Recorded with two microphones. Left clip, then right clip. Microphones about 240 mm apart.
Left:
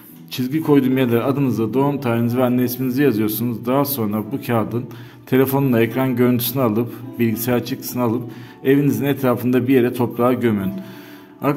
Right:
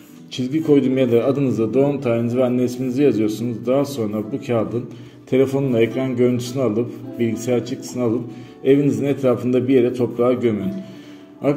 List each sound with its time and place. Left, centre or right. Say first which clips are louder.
0.3 s a man's voice: even; left